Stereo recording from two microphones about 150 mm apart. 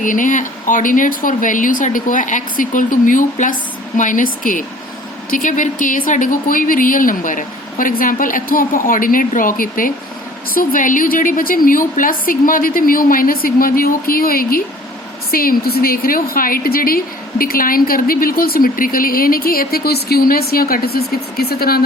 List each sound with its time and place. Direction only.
0.0 s a woman's voice: 60° left (ahead or behind); by 21.8 s 90° left